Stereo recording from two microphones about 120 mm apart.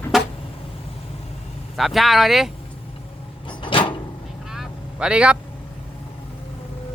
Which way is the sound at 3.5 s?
45° left (ahead or behind).